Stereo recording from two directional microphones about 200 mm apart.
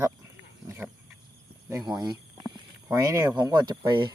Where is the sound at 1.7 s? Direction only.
20° right (ahead or behind).